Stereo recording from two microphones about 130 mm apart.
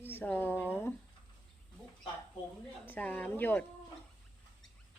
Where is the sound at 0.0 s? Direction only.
15° left (ahead or behind).